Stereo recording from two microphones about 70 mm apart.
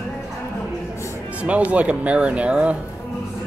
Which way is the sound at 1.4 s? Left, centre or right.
Centre.